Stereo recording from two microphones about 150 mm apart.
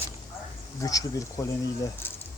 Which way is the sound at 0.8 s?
25° left (ahead or behind).